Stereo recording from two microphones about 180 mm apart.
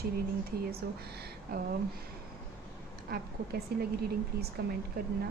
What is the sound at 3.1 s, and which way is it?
Speech, 60° right (ahead or behind).